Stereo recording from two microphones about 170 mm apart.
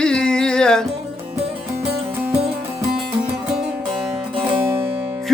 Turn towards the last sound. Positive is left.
turn(degrees=-15)  # may be behind; listen again after turning